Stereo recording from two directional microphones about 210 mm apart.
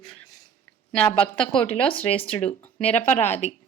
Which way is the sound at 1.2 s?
25° left (ahead or behind).